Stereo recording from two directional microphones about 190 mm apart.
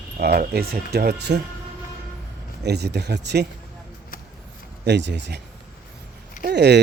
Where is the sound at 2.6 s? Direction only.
60° right (ahead or behind).